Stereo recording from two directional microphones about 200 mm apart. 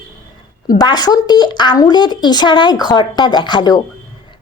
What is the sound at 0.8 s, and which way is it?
A woman's voice, 20° left (ahead or behind).